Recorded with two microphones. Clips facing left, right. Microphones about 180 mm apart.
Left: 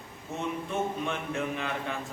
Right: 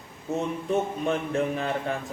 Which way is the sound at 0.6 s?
35° right (ahead or behind).